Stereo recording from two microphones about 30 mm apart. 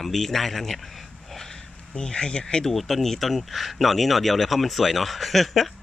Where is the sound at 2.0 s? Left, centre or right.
Left.